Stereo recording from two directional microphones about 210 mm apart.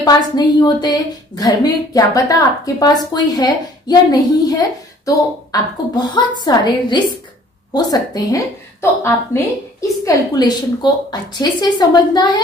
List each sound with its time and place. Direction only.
0.0 s a woman's voice: 20° left (ahead or behind)